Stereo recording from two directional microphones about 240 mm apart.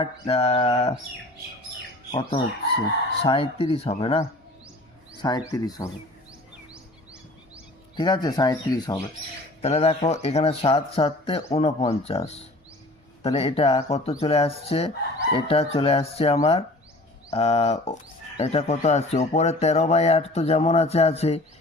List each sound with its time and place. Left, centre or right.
0.0 s speech: left
3.2 s speech: left
5.5 s speech: centre
7.9 s speech: centre
9.6 s speech: left